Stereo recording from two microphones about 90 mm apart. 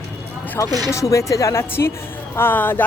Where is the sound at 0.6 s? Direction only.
35° left (ahead or behind).